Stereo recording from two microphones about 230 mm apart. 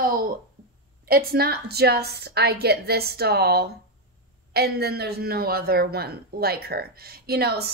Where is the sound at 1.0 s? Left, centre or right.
Right.